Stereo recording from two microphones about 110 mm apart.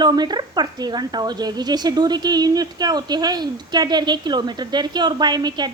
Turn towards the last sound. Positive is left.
turn(degrees=-40)  # may be behind; listen again after turning